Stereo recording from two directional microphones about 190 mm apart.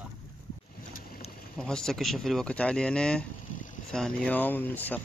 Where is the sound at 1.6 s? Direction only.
5° left (ahead or behind).